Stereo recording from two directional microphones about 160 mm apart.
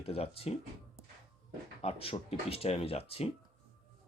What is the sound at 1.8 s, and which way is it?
Speech, 35° left (ahead or behind).